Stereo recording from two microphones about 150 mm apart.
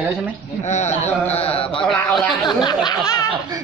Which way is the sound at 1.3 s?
40° left (ahead or behind).